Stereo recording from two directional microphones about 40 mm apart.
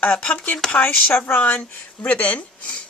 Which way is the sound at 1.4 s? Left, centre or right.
Left.